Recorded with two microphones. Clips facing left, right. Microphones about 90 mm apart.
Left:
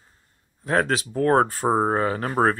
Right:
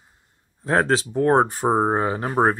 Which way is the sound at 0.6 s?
30° right (ahead or behind).